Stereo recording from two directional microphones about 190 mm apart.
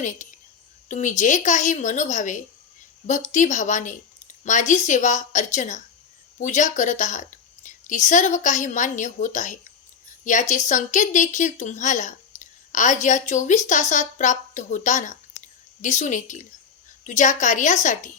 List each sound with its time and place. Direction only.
0.0 s a woman's voice: 40° left (ahead or behind)